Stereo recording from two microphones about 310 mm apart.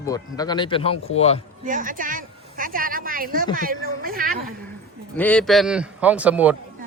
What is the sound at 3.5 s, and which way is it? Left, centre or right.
Speech, right.